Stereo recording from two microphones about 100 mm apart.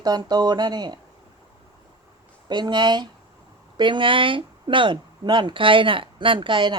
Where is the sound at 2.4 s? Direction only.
50° right (ahead or behind).